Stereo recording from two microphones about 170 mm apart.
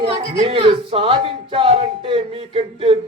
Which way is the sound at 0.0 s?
35° right (ahead or behind).